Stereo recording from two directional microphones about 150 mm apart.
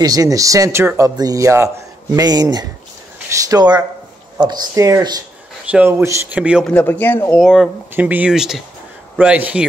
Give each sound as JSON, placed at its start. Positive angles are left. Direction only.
{"t": 0.0, "sound": "speech", "side_deg": -25}
{"t": 5.7, "sound": "speech", "side_deg": -10}
{"t": 6.6, "sound": "a man's voice", "side_deg": 10}
{"t": 7.3, "sound": "speech", "side_deg": 0}